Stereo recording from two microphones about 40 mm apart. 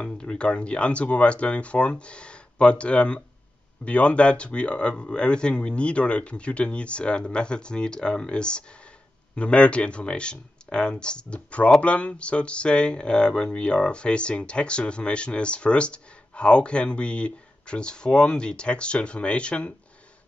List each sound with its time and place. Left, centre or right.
0.4 s speech: left